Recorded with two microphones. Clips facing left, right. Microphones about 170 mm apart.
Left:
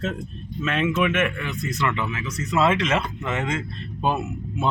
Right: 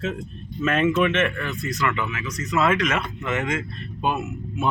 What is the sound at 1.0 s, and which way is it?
Speech, 40° right (ahead or behind).